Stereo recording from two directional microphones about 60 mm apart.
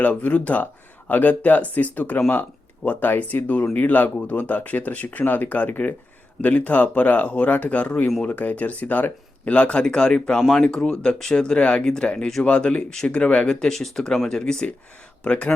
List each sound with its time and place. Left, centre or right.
0.0 s speech: left